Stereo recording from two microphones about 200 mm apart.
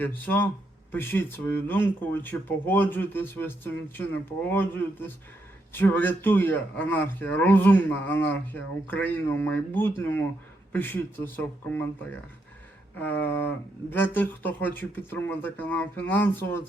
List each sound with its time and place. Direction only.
0.0 s speech: 10° left (ahead or behind)
13.0 s speech: 10° left (ahead or behind)